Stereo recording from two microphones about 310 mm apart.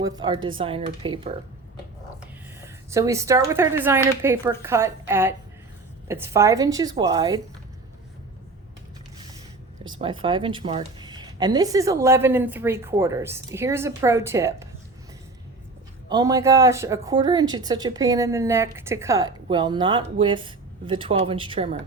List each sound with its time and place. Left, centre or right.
0.0 s a woman's voice: centre
2.6 s a woman's voice: centre
10.0 s a woman's voice: centre
16.0 s a woman's voice: centre